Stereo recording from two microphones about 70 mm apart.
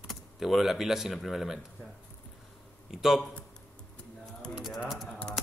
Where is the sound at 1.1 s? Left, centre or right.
Centre.